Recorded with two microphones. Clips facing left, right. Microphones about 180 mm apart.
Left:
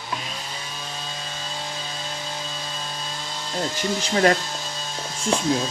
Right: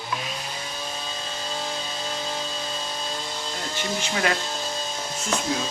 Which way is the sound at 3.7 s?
35° left (ahead or behind).